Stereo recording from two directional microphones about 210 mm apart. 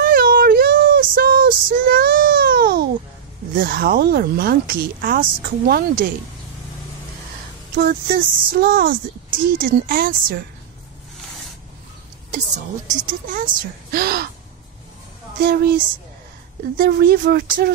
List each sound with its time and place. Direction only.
0.0 s child singing: 45° right (ahead or behind)
3.5 s speech: 45° right (ahead or behind)
7.7 s speech: 45° right (ahead or behind)
13.0 s speech: 40° right (ahead or behind)
15.4 s speech: 45° right (ahead or behind)